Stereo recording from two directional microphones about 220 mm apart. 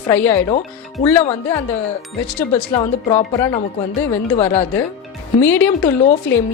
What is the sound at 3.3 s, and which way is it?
Speech, 15° left (ahead or behind).